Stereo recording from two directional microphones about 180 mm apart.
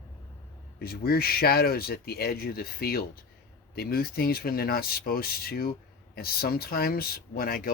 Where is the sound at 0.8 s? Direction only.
55° left (ahead or behind).